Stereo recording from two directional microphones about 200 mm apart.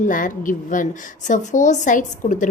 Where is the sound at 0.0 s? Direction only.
40° left (ahead or behind).